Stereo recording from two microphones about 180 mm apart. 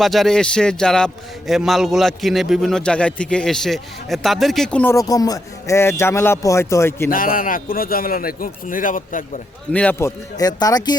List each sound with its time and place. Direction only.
0.0 s a man's voice: centre (ahead or behind)
7.1 s a man's voice: 50° left (ahead or behind)
9.7 s a man's voice: 10° left (ahead or behind)